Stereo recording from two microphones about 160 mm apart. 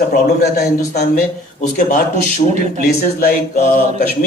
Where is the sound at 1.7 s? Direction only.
55° left (ahead or behind).